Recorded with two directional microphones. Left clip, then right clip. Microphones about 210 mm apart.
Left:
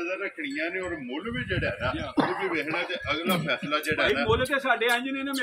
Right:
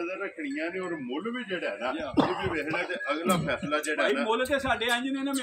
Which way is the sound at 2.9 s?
45° right (ahead or behind).